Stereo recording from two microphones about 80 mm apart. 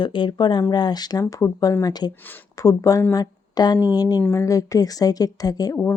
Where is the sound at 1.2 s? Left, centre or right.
Left.